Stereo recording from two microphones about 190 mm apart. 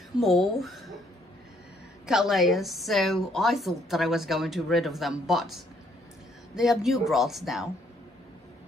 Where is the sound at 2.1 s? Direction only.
Centre (ahead or behind).